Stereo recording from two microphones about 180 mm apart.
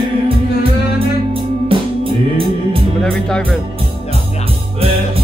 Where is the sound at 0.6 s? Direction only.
30° right (ahead or behind).